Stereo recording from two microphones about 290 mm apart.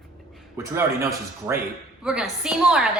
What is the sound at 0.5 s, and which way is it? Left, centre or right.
Speech, centre.